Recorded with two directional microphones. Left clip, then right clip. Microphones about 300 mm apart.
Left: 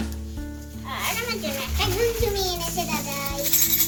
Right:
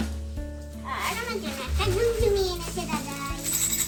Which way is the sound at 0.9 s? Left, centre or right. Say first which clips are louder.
Left 2 dB; centre.